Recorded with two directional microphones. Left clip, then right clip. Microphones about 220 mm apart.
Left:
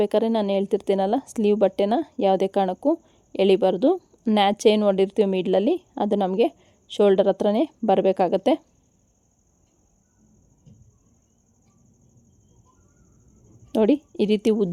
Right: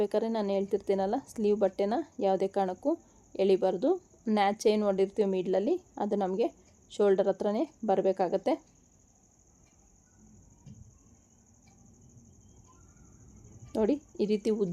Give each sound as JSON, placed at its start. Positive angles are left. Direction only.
{"t": 0.0, "sound": "a woman's voice", "side_deg": 40}
{"t": 13.7, "sound": "a woman's voice", "side_deg": 40}